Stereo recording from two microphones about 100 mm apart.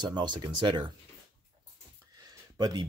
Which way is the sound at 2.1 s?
40° right (ahead or behind).